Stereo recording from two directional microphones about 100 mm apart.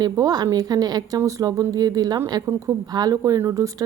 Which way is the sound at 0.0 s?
40° right (ahead or behind).